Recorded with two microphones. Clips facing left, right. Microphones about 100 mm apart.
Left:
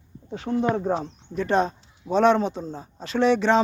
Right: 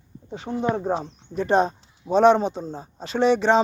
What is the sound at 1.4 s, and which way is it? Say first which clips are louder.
Speech: right 2 dB; 30° right (ahead or behind).